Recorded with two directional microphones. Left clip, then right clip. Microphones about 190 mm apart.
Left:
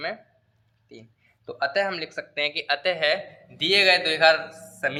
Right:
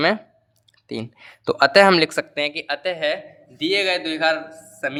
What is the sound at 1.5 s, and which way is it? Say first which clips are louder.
Speech: right 12 dB; 40° right (ahead or behind).